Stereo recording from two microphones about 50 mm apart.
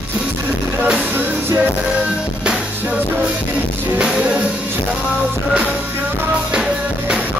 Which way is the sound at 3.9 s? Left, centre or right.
Centre.